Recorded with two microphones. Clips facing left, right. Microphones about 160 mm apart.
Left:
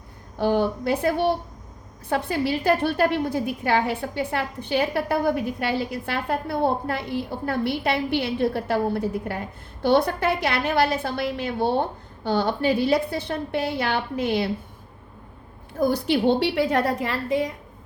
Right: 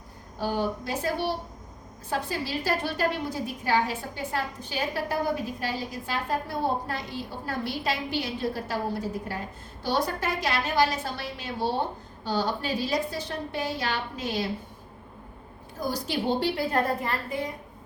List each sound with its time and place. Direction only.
0.3 s a woman's voice: 60° left (ahead or behind)
15.8 s a woman's voice: 60° left (ahead or behind); by 17.5 s 90° left